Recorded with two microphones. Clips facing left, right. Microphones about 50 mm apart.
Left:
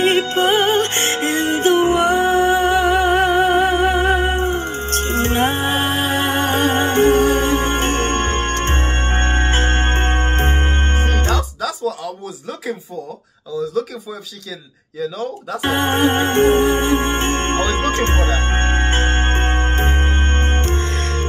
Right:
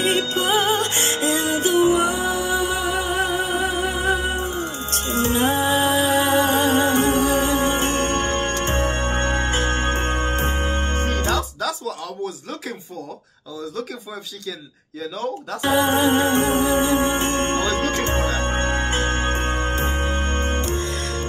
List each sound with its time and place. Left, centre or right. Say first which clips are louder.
0.0 s music: left 5 dB; left
11.3 s music: left 1 dB; centre
15.0 s speech: left 3 dB; centre
15.6 s music: left 1 dB; left